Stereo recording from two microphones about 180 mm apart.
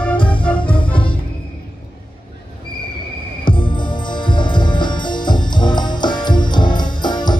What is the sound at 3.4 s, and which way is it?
Music, 25° left (ahead or behind).